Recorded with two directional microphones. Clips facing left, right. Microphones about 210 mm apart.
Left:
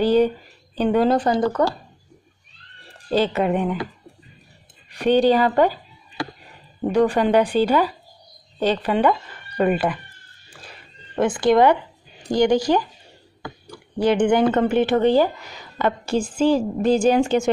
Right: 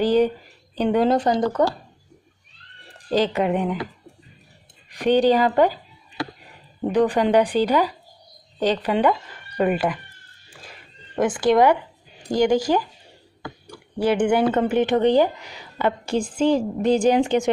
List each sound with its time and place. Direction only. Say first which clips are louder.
0.0 s a sound: left 1 dB; 15° right (ahead or behind)
0.7 s a woman's voice: left 1 dB; 20° right (ahead or behind)
3.1 s speech: left 1 dB; 15° right (ahead or behind)
4.8 s speech: left 1 dB; 15° right (ahead or behind)
6.9 s speech: left 1 dB; 15° right (ahead or behind)
11.1 s speech: left 1 dB; 10° right (ahead or behind)
13.9 s speech: left 2 dB; 10° right (ahead or behind)